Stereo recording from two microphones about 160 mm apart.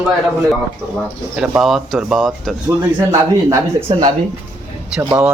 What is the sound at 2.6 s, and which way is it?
Speech, 20° right (ahead or behind).